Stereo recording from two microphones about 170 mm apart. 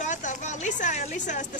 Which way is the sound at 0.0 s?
45° left (ahead or behind).